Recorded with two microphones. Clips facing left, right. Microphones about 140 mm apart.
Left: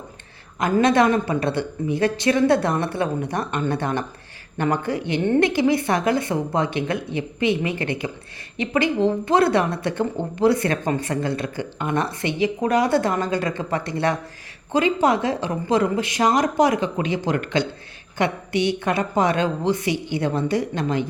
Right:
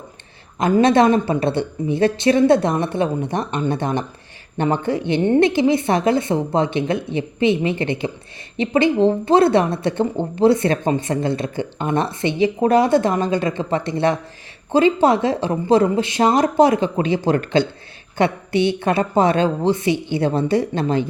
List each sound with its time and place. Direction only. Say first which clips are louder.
0.6 s speech: right 3 dB; 25° right (ahead or behind)